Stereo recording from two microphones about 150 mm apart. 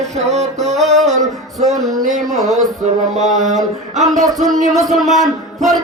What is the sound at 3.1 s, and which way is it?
Mantra, 50° right (ahead or behind).